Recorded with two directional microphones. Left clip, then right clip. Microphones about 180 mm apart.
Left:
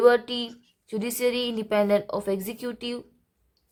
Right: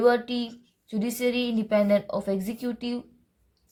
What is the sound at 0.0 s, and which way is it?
A woman's voice, 45° left (ahead or behind).